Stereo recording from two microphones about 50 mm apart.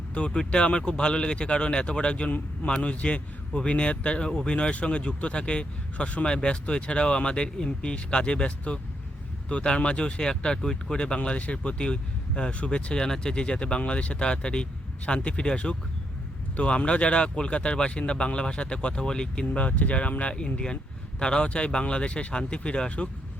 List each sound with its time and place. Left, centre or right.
0.1 s speech: left
4.3 s speech: centre
4.5 s speech: left
19.5 s speech: left